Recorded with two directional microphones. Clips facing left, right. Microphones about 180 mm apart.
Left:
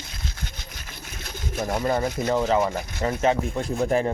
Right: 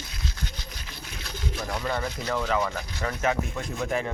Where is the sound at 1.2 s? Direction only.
45° left (ahead or behind).